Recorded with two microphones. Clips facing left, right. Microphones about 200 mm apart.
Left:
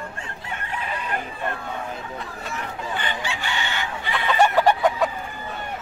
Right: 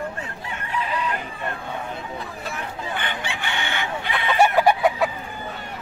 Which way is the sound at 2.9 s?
60° right (ahead or behind).